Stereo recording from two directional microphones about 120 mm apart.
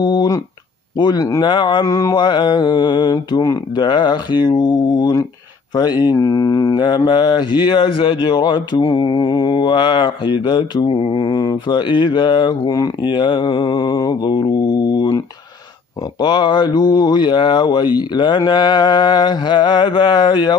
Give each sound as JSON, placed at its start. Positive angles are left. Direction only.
{"t": 0.0, "sound": "speech", "side_deg": 35}
{"t": 6.1, "sound": "mantra", "side_deg": 25}
{"t": 7.1, "sound": "speech", "side_deg": 35}